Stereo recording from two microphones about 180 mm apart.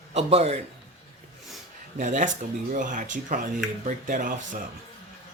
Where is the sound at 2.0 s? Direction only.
45° right (ahead or behind).